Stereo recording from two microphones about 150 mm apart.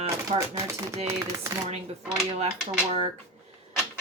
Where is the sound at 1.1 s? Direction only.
20° right (ahead or behind).